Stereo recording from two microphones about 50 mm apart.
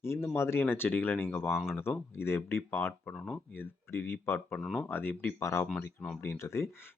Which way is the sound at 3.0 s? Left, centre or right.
Centre.